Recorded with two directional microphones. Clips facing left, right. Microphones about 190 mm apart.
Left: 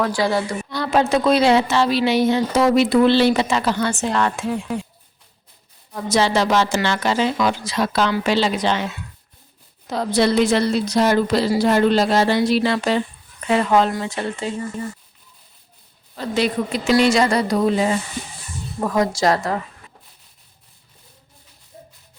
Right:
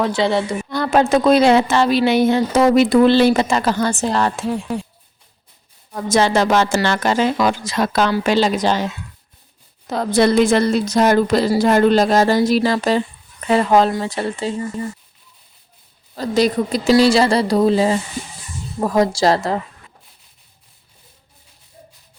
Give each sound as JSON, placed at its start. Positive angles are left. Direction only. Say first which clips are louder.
{"t": 0.0, "sound": "a woman's voice", "louder": "right 2 dB", "side_deg": -25}
{"t": 0.7, "sound": "a woman's voice", "louder": "right 3 dB", "side_deg": -50}
{"t": 5.9, "sound": "a woman's voice", "louder": "right 2 dB", "side_deg": -50}
{"t": 9.9, "sound": "a woman's voice", "louder": "right 3 dB", "side_deg": -50}
{"t": 16.1, "sound": "a woman's voice", "louder": "right 4 dB", "side_deg": -40}